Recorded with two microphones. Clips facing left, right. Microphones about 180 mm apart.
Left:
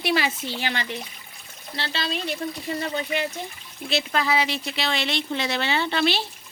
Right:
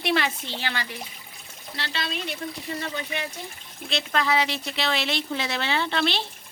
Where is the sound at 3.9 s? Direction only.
5° left (ahead or behind).